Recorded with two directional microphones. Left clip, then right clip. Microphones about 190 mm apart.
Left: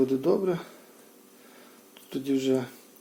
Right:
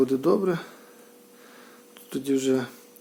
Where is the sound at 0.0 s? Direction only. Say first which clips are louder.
Right 2 dB; 25° right (ahead or behind).